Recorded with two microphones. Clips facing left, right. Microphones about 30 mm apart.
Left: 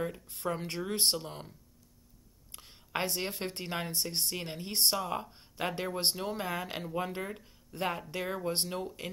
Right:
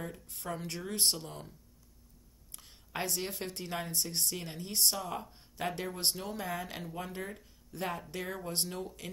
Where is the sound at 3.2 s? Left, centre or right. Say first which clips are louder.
Left 2 dB; left.